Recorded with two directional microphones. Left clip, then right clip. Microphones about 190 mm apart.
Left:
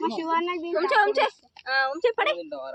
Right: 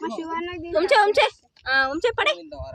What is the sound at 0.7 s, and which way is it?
A woman's voice, 50° right (ahead or behind).